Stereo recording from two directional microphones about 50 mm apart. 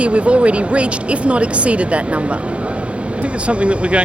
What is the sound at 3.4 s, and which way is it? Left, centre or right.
Speech, right.